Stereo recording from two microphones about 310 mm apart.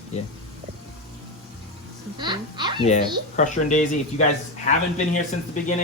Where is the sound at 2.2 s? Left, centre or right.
Centre.